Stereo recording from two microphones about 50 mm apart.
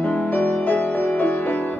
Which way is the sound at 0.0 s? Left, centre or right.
Left.